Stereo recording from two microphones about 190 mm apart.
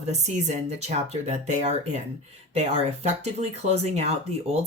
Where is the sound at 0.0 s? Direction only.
35° right (ahead or behind).